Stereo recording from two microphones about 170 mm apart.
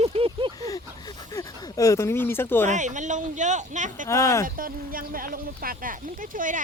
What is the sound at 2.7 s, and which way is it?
Speech, 45° right (ahead or behind).